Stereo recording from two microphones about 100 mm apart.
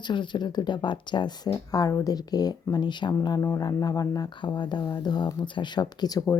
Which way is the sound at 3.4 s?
35° left (ahead or behind).